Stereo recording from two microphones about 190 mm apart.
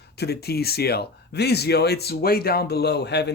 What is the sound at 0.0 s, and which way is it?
Speech, 60° left (ahead or behind).